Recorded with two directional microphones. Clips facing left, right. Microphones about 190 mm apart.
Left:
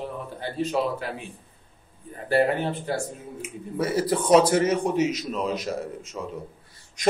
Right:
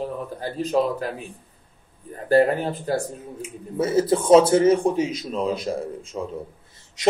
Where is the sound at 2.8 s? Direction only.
35° right (ahead or behind).